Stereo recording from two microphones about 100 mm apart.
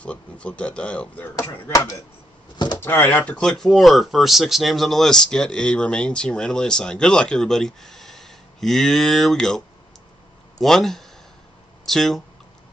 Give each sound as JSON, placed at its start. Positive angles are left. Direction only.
{"t": 0.0, "sound": "speech", "side_deg": 10}
{"t": 1.4, "sound": "speech", "side_deg": 25}
{"t": 3.1, "sound": "speech", "side_deg": 15}
{"t": 10.6, "sound": "speech", "side_deg": 0}